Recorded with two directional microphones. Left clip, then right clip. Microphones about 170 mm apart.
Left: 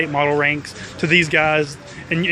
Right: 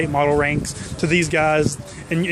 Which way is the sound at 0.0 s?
30° right (ahead or behind).